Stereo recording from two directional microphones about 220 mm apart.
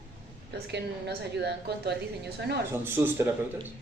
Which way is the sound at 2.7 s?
10° right (ahead or behind).